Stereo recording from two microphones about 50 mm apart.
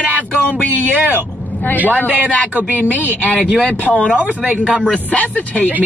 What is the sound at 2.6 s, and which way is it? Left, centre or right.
Speech, right.